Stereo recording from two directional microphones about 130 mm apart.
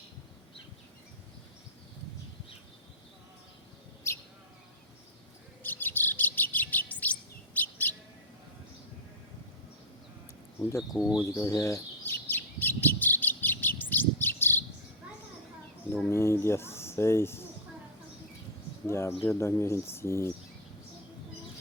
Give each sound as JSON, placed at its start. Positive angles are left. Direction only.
{"t": 4.1, "sound": "bird", "side_deg": 20}
{"t": 5.6, "sound": "chirp", "side_deg": 15}
{"t": 10.6, "sound": "speech", "side_deg": 20}
{"t": 11.2, "sound": "bird", "side_deg": 20}
{"t": 16.0, "sound": "speech", "side_deg": 20}
{"t": 18.9, "sound": "speech", "side_deg": 20}